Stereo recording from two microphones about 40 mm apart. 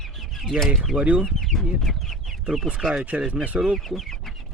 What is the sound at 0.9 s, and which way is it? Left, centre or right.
Speech, right.